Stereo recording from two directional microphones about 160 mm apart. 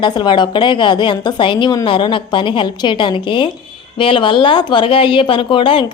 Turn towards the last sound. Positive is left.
turn(degrees=30)  # may be behind; listen again after turning